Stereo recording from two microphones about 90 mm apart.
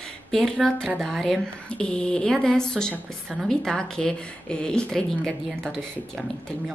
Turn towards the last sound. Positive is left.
turn(degrees=10)  # may be behind; listen again after turning